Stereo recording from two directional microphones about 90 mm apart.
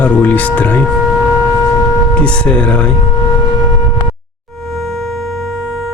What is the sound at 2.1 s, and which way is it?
Speech, 10° left (ahead or behind).